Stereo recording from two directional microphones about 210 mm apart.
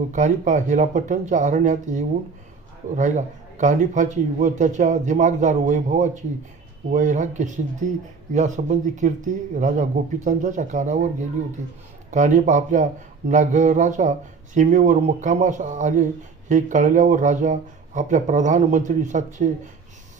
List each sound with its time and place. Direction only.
0.1 s speech: 35° right (ahead or behind)